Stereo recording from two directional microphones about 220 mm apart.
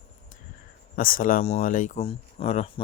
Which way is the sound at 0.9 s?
40° left (ahead or behind).